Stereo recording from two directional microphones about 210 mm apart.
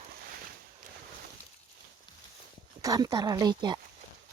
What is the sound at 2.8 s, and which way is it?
Speech, 15° right (ahead or behind).